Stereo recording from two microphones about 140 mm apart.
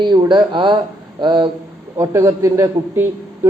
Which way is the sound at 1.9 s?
20° right (ahead or behind).